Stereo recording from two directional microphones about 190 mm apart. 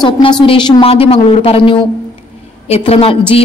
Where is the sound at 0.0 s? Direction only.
25° left (ahead or behind).